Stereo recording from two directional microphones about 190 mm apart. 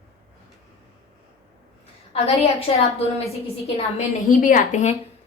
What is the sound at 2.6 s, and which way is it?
A woman's voice, 30° left (ahead or behind).